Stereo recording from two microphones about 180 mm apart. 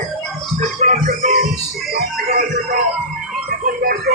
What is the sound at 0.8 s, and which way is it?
Music, 35° right (ahead or behind).